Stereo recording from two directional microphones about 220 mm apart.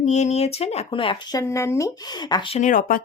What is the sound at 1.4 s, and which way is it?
Speech, 10° left (ahead or behind).